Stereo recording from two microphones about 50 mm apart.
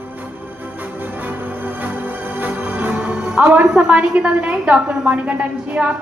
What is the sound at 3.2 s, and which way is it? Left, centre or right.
A woman's voice, centre.